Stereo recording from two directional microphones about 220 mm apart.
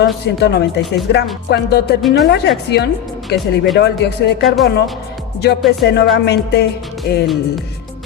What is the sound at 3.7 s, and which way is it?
Speech, 50° left (ahead or behind).